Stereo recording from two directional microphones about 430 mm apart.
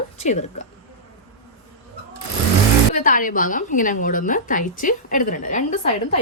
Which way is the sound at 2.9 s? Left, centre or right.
Centre.